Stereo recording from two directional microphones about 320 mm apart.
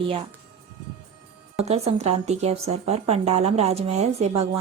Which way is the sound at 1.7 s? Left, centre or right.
Centre.